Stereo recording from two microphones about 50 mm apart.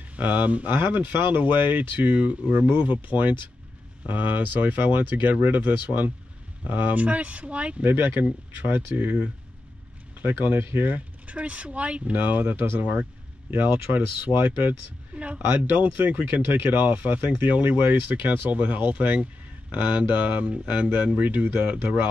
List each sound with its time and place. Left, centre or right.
0.1 s speech: right
7.8 s speech: right
11.2 s speech: right